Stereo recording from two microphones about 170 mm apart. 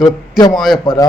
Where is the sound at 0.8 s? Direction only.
25° left (ahead or behind).